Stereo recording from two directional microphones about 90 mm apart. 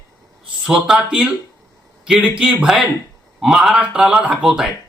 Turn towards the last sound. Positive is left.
turn(degrees=-10)  # may be behind; listen again after turning